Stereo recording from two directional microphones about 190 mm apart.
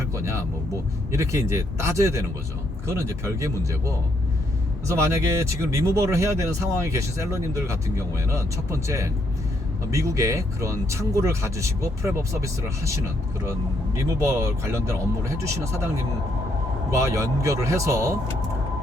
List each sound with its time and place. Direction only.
0.1 s vehicle: 15° right (ahead or behind)
1.1 s speech: 15° right (ahead or behind)
14.2 s speech: 15° right (ahead or behind)
17.0 s speech: 15° right (ahead or behind)